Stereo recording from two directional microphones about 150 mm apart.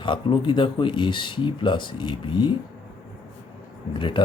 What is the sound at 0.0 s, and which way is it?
Speech, 35° left (ahead or behind).